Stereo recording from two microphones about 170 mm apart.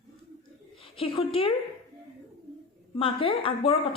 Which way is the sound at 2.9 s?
30° left (ahead or behind).